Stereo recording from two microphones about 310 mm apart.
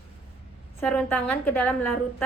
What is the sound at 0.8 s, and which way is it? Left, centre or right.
Speech, centre.